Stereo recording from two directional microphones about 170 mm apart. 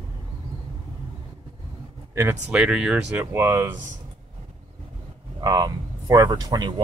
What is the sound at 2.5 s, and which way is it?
Speech, 5° right (ahead or behind).